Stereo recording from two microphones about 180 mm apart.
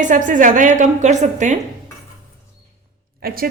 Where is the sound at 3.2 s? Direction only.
55° right (ahead or behind).